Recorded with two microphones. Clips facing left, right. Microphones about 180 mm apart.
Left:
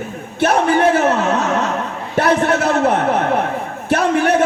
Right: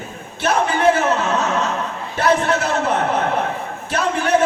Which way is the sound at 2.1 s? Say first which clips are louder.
Left 3 dB; 60° left (ahead or behind).